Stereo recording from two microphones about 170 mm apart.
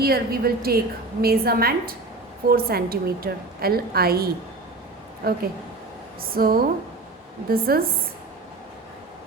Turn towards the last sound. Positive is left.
turn(degrees=-60)  # may be behind; listen again after turning